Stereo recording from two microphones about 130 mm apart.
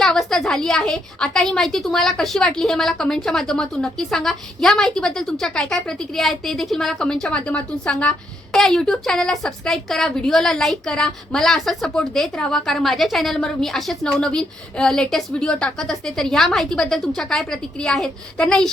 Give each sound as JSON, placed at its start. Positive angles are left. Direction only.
{"t": 0.0, "sound": "a woman's voice", "side_deg": 5}